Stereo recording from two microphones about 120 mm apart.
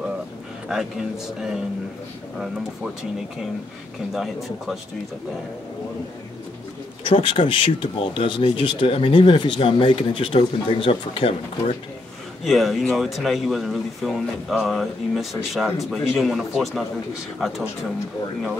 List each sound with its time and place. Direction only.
0.7 s speech: 5° right (ahead or behind)
4.1 s speech: centre (ahead or behind)
7.1 s speech: 45° left (ahead or behind)
12.4 s speech: centre (ahead or behind)